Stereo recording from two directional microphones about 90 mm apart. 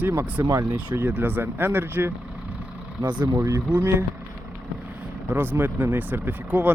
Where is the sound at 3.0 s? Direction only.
55° right (ahead or behind).